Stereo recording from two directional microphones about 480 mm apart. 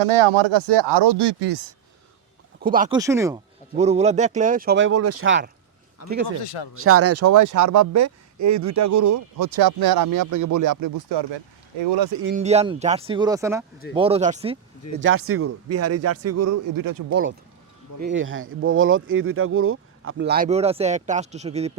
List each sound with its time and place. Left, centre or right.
0.0 s speech: right
2.6 s speech: centre
6.0 s speech: left
6.4 s speech: left
6.7 s speech: right
12.2 s speech: centre
15.0 s speech: right
18.0 s speech: right